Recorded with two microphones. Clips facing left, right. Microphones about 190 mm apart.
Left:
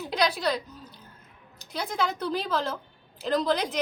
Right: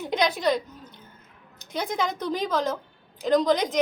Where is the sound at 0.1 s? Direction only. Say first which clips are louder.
Right 3 dB; 20° right (ahead or behind).